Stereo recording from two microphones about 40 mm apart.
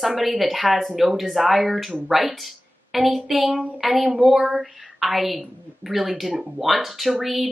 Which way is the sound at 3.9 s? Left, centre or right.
Right.